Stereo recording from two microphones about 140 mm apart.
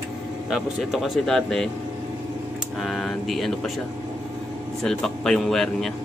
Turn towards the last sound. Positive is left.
turn(degrees=0)  # may be behind; listen again after turning